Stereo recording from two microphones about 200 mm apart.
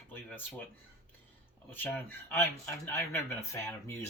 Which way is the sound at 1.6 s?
10° left (ahead or behind).